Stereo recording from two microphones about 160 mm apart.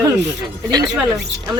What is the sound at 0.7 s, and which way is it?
Speech, 25° right (ahead or behind).